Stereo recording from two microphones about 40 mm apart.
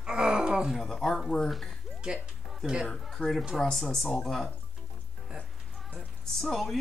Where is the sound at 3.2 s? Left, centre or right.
Left.